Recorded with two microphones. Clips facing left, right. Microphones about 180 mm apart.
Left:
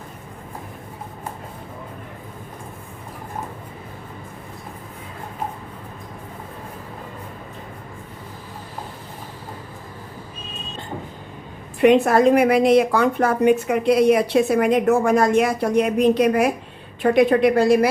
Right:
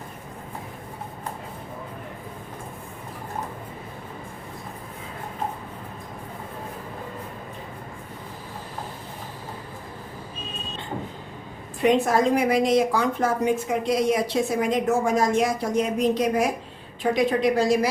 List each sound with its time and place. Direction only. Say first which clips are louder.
11.8 s a woman's voice: left 6 dB; 65° left (ahead or behind)